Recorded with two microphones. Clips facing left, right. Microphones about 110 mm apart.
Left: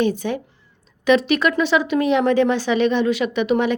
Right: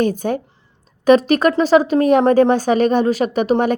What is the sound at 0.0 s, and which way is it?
Speech, 45° right (ahead or behind).